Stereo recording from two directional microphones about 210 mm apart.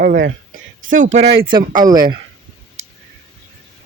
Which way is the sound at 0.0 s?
40° right (ahead or behind).